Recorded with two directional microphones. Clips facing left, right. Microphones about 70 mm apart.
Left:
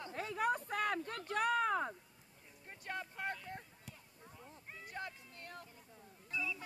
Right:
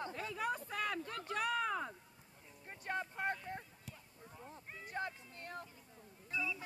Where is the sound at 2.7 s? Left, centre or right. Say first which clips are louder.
Right 3 dB; right.